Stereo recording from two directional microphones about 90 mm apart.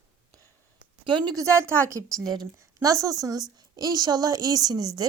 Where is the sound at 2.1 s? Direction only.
50° right (ahead or behind).